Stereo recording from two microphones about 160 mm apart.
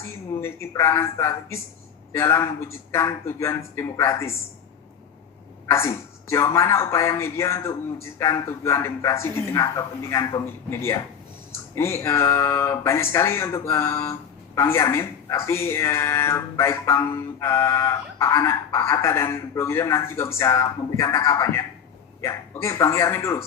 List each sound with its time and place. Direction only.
0.3 s speech: 15° left (ahead or behind)
5.7 s speech: 15° left (ahead or behind)